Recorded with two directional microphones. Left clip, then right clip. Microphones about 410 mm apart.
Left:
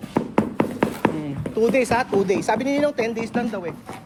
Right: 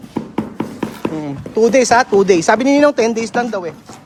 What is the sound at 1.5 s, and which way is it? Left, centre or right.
Speech, centre.